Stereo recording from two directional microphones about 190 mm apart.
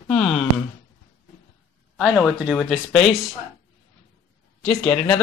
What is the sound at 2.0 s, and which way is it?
Speech, centre (ahead or behind).